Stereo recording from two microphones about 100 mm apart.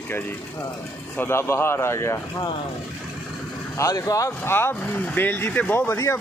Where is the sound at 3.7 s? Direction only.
30° left (ahead or behind).